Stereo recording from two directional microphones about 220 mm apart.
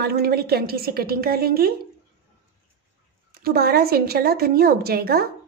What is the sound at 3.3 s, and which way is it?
A woman's voice, 40° right (ahead or behind).